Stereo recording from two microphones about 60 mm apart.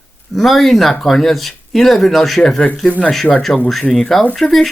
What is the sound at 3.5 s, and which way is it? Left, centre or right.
Speech, centre.